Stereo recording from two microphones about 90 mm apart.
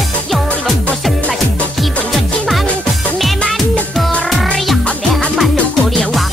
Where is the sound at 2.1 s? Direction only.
Centre (ahead or behind).